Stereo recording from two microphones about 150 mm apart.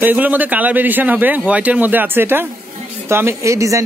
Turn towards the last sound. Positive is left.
turn(degrees=-20)  # may be behind; listen again after turning